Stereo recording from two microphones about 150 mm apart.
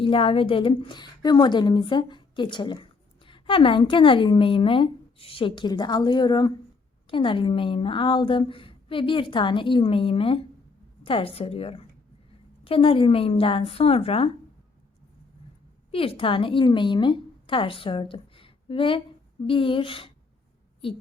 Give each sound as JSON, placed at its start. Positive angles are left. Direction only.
{"t": 0.0, "sound": "a woman's voice", "side_deg": 35}
{"t": 15.9, "sound": "a woman's voice", "side_deg": 40}